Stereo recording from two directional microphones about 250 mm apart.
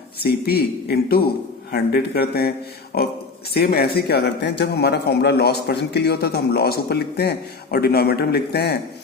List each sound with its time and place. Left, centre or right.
0.2 s speech: left
3.5 s speech: left